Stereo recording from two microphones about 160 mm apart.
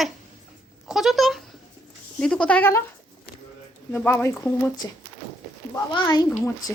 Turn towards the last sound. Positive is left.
turn(degrees=25)  # may be behind; listen again after turning